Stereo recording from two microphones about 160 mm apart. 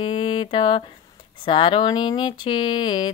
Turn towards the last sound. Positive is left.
turn(degrees=30)  # may be behind; listen again after turning